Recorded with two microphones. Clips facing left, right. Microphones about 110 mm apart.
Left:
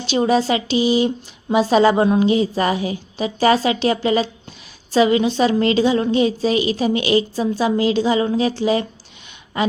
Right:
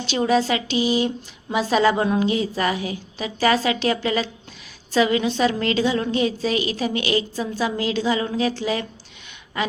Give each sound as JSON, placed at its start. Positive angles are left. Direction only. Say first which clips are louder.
{"t": 0.1, "sound": "speech", "louder": "left 3 dB", "side_deg": 20}